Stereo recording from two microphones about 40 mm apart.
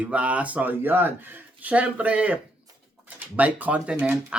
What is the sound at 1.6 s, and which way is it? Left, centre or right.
Speech, right.